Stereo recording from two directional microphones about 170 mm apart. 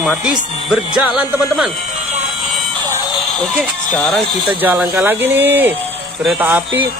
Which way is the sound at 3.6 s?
5° left (ahead or behind).